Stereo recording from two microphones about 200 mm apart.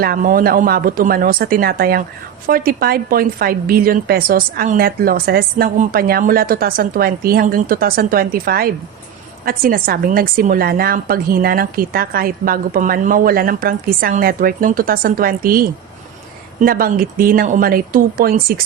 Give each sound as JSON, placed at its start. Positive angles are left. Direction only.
{"t": 0.0, "sound": "a woman's voice", "side_deg": -45}